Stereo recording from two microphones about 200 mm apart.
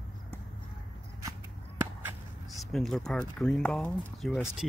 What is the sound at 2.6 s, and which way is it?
Speech, centre (ahead or behind).